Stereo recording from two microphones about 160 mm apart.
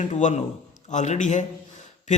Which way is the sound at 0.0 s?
50° left (ahead or behind).